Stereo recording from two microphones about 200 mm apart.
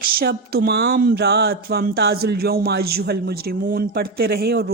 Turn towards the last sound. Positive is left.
turn(degrees=-50)  # may be behind; listen again after turning